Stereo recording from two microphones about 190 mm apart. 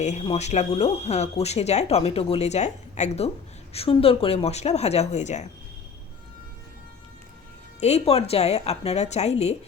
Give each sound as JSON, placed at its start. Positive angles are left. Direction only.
{"t": 0.0, "sound": "speech", "side_deg": 35}
{"t": 7.8, "sound": "speech", "side_deg": 35}